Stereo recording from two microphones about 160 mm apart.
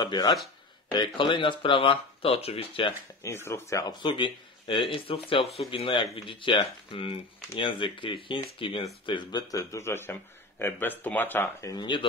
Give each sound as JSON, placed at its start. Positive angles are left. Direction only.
{"t": 0.0, "sound": "speech", "side_deg": 25}
{"t": 3.2, "sound": "speech", "side_deg": 15}
{"t": 3.9, "sound": "speech", "side_deg": 30}
{"t": 11.7, "sound": "speech", "side_deg": 30}